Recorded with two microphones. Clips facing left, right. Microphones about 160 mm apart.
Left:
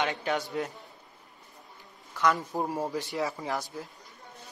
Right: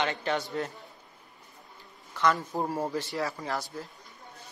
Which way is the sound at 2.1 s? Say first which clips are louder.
Even; 5° left (ahead or behind).